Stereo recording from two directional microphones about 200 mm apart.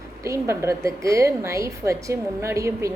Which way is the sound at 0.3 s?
15° right (ahead or behind).